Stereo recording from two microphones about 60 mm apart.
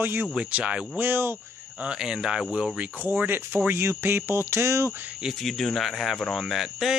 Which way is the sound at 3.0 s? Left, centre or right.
Right.